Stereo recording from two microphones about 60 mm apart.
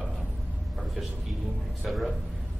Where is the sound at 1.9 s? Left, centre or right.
Centre.